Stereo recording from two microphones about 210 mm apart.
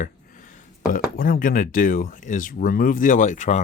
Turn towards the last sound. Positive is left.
turn(degrees=35)  # may be behind; listen again after turning